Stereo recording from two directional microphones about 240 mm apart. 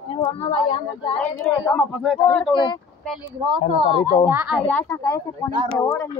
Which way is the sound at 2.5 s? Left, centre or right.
Centre.